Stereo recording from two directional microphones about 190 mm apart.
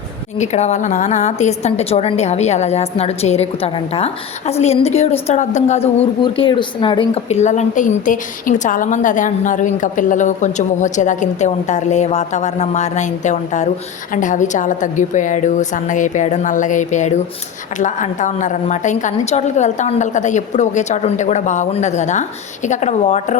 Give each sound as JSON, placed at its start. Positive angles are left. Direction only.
{"t": 0.3, "sound": "a woman's voice", "side_deg": 35}